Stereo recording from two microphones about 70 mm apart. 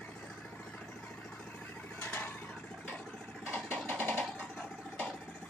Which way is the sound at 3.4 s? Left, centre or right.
Left.